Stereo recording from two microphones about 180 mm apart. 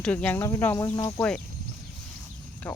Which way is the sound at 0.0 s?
5° left (ahead or behind).